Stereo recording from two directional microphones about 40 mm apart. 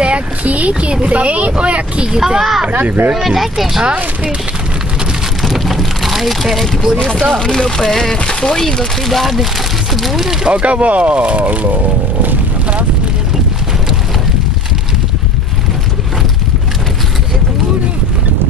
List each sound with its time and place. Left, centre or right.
0.0 s speech: right
2.0 s speech: centre
2.7 s speech: right
3.3 s speech: centre
5.4 s vehicle: centre
7.3 s speech: centre
10.4 s speech: right